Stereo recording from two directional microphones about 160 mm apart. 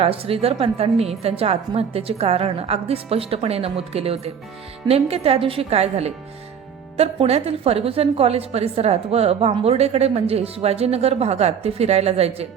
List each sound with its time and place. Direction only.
0.0 s a woman's voice: 35° right (ahead or behind)